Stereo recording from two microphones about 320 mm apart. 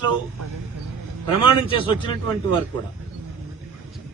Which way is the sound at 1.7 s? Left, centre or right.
Centre.